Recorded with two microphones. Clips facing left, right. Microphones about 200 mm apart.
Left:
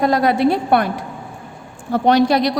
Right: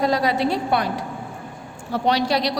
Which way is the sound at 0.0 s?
55° left (ahead or behind).